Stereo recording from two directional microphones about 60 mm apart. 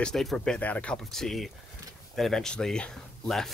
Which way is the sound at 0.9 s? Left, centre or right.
Centre.